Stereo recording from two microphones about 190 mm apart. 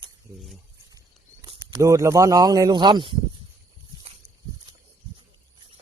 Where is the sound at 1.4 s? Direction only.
25° right (ahead or behind).